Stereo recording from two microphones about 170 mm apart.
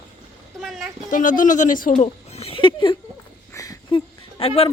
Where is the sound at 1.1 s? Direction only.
50° left (ahead or behind).